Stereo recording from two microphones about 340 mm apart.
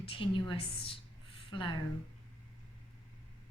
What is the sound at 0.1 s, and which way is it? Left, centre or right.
A woman's voice, centre.